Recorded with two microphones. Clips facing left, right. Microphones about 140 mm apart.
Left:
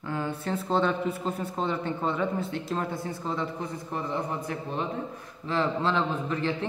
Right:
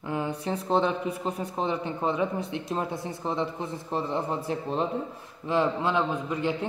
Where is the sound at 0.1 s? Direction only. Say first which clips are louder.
Right 1 dB; 15° right (ahead or behind).